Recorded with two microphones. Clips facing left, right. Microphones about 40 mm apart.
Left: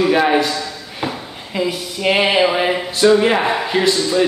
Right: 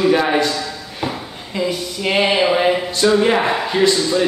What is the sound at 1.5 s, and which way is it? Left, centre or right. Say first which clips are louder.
A man's voice: even; centre.